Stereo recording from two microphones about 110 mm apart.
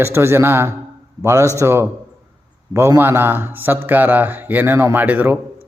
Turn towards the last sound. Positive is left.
turn(degrees=-15)  # may be behind; listen again after turning